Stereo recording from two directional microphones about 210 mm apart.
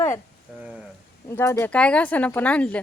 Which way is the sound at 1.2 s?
10° left (ahead or behind).